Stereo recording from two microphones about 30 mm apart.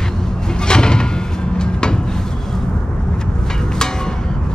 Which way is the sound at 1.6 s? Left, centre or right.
Left.